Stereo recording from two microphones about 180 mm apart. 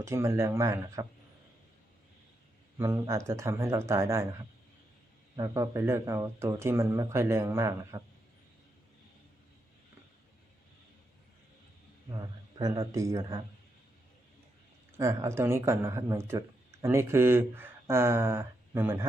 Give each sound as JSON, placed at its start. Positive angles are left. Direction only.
{"t": 0.0, "sound": "speech", "side_deg": -15}
{"t": 2.7, "sound": "speech", "side_deg": -15}
{"t": 5.4, "sound": "speech", "side_deg": -15}
{"t": 12.1, "sound": "speech", "side_deg": -20}
{"t": 14.9, "sound": "speech", "side_deg": -15}